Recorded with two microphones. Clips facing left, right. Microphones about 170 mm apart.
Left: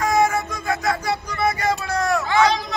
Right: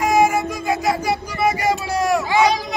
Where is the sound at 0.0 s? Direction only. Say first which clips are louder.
Right 3 dB; 15° right (ahead or behind).